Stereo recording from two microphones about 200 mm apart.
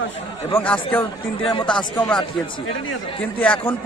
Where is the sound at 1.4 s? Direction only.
25° left (ahead or behind).